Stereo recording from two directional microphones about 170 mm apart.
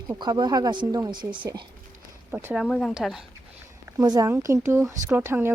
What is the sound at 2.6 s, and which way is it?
Speech, 5° left (ahead or behind).